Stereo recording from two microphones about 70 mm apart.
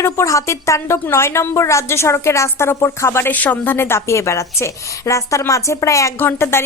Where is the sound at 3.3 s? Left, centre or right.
Left.